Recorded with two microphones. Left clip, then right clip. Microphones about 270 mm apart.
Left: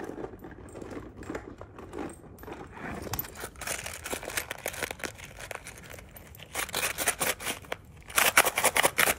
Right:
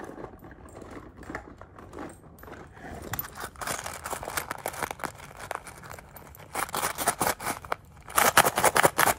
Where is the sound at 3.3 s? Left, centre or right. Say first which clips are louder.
Right 3 dB; centre.